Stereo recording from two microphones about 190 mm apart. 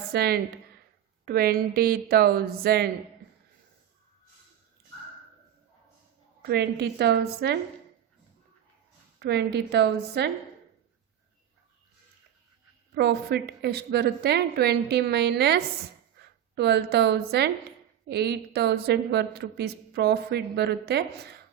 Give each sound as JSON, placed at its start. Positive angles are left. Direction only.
{"t": 0.1, "sound": "a woman's voice", "side_deg": -55}
{"t": 6.4, "sound": "a woman's voice", "side_deg": -60}
{"t": 9.1, "sound": "a woman's voice", "side_deg": -60}
{"t": 13.0, "sound": "a woman's voice", "side_deg": -60}
{"t": 16.2, "sound": "a sound", "side_deg": -60}
{"t": 16.6, "sound": "a woman's voice", "side_deg": -60}